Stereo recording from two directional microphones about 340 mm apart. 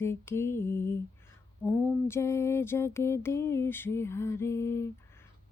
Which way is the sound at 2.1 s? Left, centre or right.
Centre.